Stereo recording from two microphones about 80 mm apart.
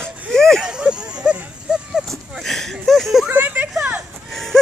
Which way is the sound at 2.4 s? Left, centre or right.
Centre.